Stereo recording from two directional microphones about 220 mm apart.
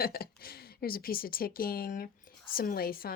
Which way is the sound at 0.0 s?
45° left (ahead or behind).